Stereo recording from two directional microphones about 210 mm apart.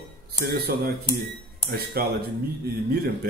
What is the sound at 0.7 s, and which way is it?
A man's voice, 50° right (ahead or behind).